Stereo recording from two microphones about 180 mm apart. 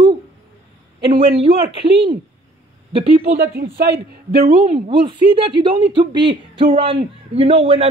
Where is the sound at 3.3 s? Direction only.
60° right (ahead or behind).